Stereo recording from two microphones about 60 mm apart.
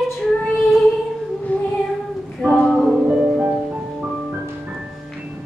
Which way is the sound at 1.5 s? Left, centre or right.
Left.